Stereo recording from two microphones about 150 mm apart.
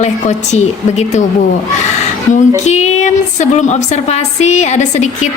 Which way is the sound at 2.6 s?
50° left (ahead or behind).